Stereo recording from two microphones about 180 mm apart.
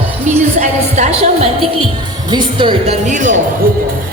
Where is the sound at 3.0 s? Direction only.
45° right (ahead or behind).